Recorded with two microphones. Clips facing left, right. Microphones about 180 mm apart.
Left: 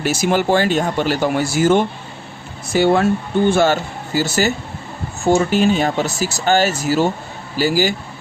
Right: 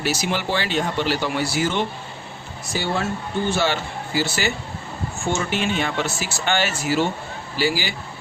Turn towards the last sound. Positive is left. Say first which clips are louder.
# left 6 dB
turn(degrees=45)  # may be behind; listen again after turning